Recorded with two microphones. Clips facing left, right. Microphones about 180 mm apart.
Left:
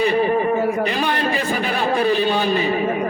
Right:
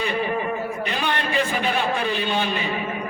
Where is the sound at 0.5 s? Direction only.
70° left (ahead or behind).